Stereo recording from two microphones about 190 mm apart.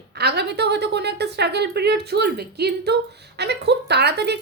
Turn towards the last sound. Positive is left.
turn(degrees=-60)  # may be behind; listen again after turning